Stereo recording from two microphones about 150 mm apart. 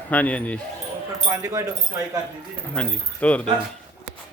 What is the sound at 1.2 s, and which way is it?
Speech, 25° right (ahead or behind).